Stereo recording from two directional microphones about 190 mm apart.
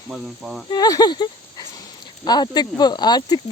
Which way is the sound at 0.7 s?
20° left (ahead or behind).